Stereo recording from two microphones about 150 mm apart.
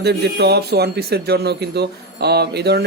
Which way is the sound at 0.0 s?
90° right.